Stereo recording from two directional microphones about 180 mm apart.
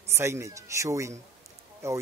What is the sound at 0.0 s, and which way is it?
Speech, 15° right (ahead or behind).